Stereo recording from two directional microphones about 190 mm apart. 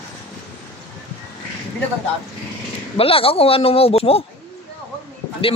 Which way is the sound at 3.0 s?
30° left (ahead or behind).